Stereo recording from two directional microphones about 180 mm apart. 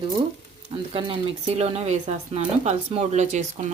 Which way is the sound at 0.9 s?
30° right (ahead or behind).